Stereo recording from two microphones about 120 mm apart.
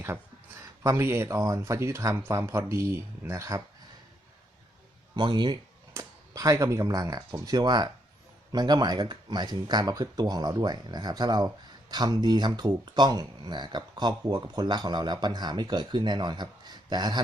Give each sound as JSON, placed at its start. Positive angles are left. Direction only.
{"t": 0.6, "sound": "speech", "side_deg": -25}
{"t": 5.1, "sound": "speech", "side_deg": -40}
{"t": 5.9, "sound": "speech", "side_deg": -25}